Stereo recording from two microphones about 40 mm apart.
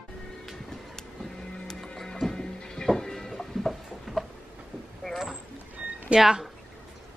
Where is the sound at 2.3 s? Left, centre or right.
Centre.